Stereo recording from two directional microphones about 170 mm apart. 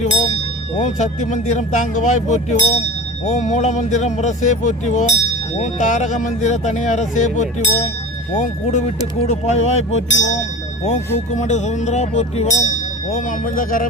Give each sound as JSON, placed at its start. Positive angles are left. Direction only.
{"t": 0.8, "sound": "speech", "side_deg": 45}
{"t": 9.2, "sound": "speech", "side_deg": 40}